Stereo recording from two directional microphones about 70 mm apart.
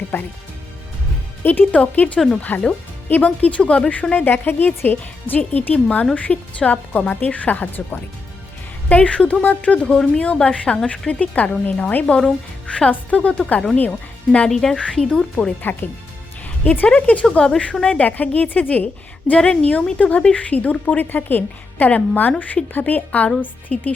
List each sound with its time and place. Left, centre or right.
0.1 s speech: left
1.5 s speech: left
2.1 s speech: centre
2.4 s speech: centre
16.6 s speech: centre